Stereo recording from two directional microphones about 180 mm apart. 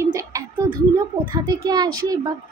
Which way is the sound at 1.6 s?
20° right (ahead or behind).